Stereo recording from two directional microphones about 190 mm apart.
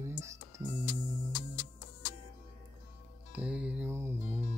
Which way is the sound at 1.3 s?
45° left (ahead or behind).